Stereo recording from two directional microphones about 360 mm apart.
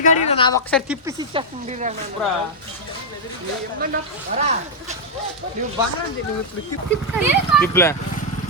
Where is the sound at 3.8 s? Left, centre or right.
Right.